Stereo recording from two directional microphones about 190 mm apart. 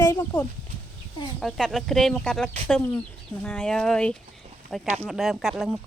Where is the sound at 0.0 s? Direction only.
20° left (ahead or behind).